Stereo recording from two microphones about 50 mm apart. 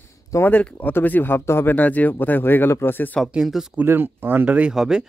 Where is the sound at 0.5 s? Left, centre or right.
Left.